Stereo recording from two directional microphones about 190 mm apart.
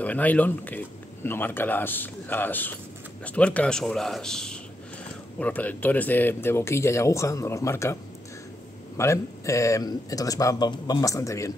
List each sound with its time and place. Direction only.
0.0 s speech: 10° left (ahead or behind)